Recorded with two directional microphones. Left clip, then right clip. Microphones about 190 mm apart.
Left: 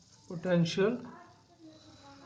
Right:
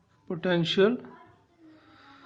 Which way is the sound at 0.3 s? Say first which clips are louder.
Right 4 dB; 30° right (ahead or behind).